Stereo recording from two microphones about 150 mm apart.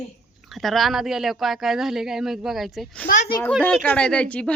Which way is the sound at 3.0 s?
65° left (ahead or behind).